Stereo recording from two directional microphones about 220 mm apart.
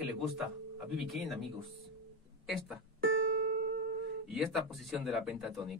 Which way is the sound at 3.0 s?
55° right (ahead or behind).